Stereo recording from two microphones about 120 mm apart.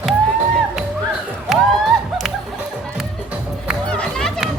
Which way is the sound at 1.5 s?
5° right (ahead or behind).